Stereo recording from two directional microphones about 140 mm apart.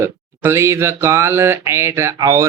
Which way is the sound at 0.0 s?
20° right (ahead or behind).